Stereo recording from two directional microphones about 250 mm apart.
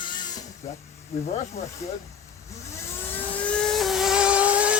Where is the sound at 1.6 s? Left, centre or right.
Left.